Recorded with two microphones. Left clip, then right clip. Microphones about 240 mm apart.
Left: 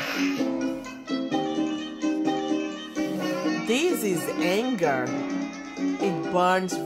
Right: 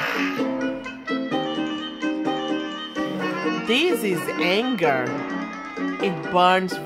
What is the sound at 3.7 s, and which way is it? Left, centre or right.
Music, centre.